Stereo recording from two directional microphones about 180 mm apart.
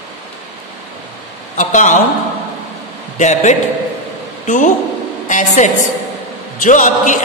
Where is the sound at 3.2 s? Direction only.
40° left (ahead or behind).